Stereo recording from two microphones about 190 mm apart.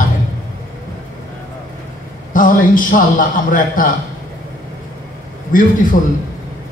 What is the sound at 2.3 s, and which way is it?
A man's voice, 45° left (ahead or behind).